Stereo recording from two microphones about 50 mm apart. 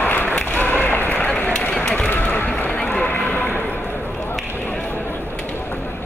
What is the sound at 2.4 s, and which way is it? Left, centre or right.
Run, centre.